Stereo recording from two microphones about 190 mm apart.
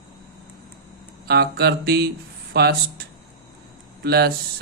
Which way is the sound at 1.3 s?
60° right (ahead or behind).